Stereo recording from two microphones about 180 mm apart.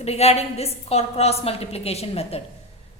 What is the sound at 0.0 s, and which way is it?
A woman's voice, 35° left (ahead or behind).